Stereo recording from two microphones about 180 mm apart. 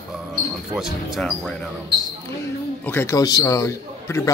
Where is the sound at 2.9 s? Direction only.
15° left (ahead or behind).